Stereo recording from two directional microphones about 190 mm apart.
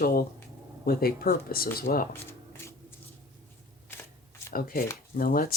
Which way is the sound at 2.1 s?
15° left (ahead or behind).